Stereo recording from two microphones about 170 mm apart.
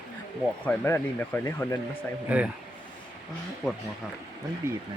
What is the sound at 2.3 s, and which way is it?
Speech, 10° right (ahead or behind).